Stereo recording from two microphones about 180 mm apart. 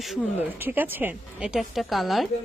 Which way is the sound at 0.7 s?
10° right (ahead or behind).